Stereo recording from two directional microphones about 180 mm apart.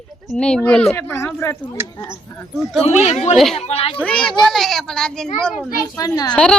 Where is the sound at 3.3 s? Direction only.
Centre (ahead or behind).